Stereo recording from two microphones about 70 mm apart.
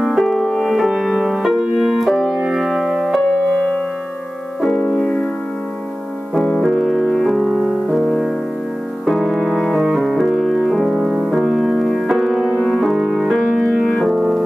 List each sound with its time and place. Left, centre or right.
0.0 s music: centre
3.3 s music: centre
6.3 s music: centre
12.9 s music: centre